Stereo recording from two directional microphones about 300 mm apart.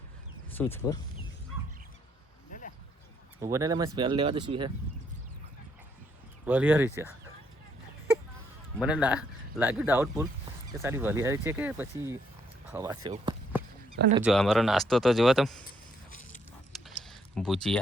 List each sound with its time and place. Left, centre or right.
0.5 s speech: centre
2.5 s a sound: left
3.4 s speech: centre
6.4 s speech: centre
8.8 s speech: centre
14.3 s speech: centre
17.0 s a sound: centre